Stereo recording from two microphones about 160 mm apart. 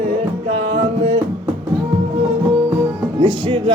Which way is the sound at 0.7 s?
30° right (ahead or behind).